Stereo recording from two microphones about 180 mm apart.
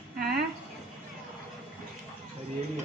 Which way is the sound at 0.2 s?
60° right (ahead or behind).